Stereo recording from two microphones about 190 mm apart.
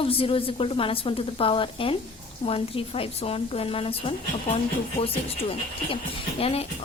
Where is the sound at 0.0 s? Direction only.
30° left (ahead or behind).